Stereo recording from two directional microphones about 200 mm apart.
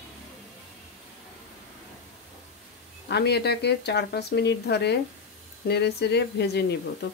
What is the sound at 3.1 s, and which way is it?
Speech, 55° left (ahead or behind).